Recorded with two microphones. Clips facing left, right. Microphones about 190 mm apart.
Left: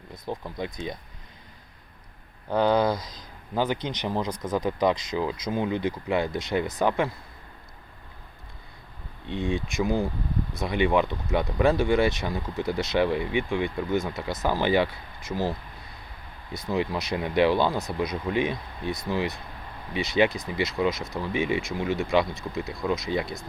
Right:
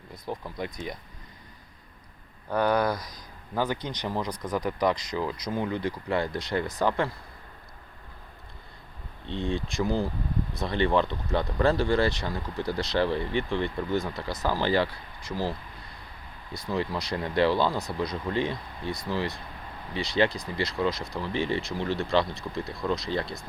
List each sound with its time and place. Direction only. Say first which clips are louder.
0.3 s speech: left 2 dB; 20° left (ahead or behind)
2.5 s speech: left 3 dB; 25° left (ahead or behind)
9.2 s speech: left 2 dB; 15° left (ahead or behind)